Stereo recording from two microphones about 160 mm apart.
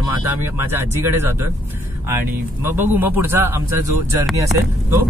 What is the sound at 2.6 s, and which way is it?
Speech, 10° right (ahead or behind).